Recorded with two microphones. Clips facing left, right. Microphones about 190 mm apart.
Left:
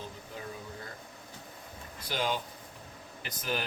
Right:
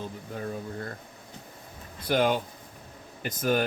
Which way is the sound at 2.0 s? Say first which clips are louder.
Right 8 dB; 55° right (ahead or behind).